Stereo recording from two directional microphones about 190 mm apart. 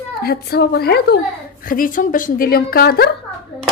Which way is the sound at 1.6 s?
45° left (ahead or behind).